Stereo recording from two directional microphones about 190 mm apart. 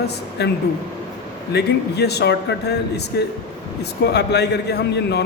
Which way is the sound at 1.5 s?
60° left (ahead or behind).